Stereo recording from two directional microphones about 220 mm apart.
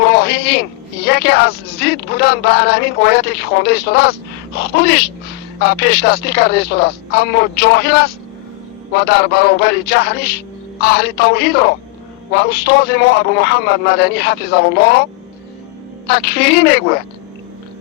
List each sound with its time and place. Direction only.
0.0 s a sound: 45° left (ahead or behind)
1.0 s speech: 45° left (ahead or behind)
9.0 s speech: 45° left (ahead or behind)
16.0 s speech: 45° left (ahead or behind)